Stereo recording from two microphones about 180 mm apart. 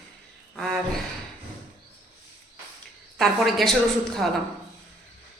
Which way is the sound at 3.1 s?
Centre (ahead or behind).